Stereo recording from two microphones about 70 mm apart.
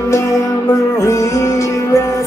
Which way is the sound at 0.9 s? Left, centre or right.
Left.